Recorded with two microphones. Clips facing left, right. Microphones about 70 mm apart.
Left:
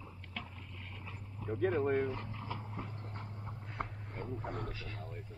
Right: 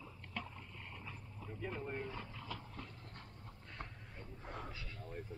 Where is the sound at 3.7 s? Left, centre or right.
Left.